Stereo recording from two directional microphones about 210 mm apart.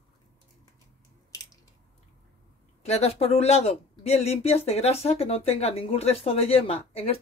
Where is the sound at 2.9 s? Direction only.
30° left (ahead or behind).